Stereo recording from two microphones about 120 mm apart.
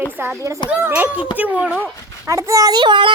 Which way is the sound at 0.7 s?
15° right (ahead or behind).